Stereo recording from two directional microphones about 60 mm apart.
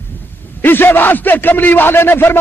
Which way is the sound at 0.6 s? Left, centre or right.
Left.